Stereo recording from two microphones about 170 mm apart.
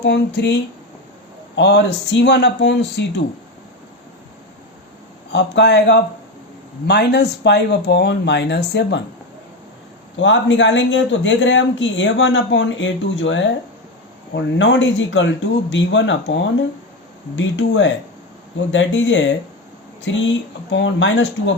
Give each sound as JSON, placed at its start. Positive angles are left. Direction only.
{"t": 0.0, "sound": "speech", "side_deg": 90}
{"t": 1.5, "sound": "speech", "side_deg": 90}
{"t": 5.3, "sound": "speech", "side_deg": 90}
{"t": 10.2, "sound": "speech", "side_deg": 90}
{"t": 17.3, "sound": "speech", "side_deg": 90}